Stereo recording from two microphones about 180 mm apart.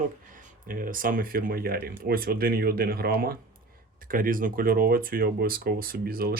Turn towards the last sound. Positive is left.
turn(degrees=-55)  # may be behind; listen again after turning